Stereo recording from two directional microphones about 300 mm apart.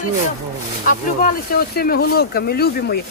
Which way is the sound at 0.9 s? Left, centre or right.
Left.